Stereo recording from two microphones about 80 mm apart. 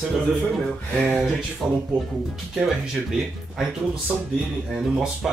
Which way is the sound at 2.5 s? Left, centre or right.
Centre.